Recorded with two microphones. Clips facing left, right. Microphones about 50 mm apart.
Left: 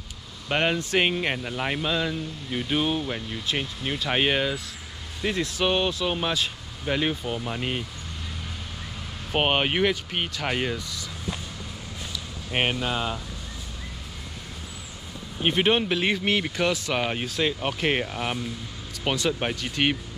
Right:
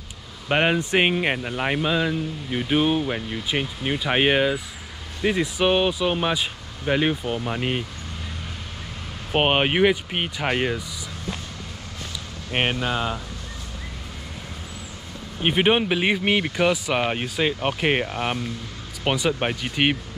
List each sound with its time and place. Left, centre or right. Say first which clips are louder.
0.5 s speech: right 4 dB; centre
9.3 s speech: right 3 dB; centre
12.4 s speech: right 2 dB; centre
15.4 s speech: right 3 dB; centre